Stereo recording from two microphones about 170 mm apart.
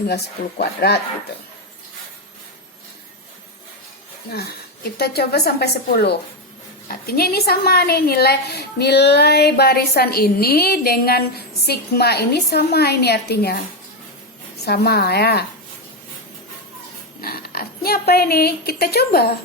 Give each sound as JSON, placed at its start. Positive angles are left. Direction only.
{"t": 0.6, "sound": "a woman's voice", "side_deg": 70}
{"t": 4.9, "sound": "a woman's voice", "side_deg": 70}
{"t": 14.6, "sound": "a woman's voice", "side_deg": 70}
{"t": 17.2, "sound": "speech", "side_deg": 65}